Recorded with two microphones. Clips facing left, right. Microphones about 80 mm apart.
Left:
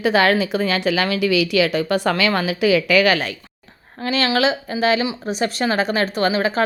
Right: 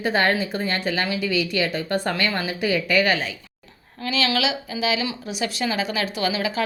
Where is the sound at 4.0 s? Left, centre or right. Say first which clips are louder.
Left 5 dB; left.